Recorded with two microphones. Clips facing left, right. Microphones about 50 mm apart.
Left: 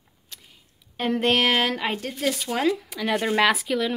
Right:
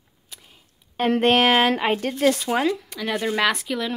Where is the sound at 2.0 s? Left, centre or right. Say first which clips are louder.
Right 6 dB; right.